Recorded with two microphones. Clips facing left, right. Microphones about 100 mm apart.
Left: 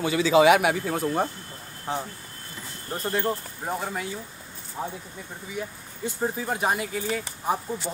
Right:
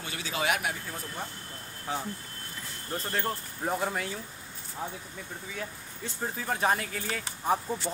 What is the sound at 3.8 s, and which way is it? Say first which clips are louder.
Speech: even; centre (ahead or behind).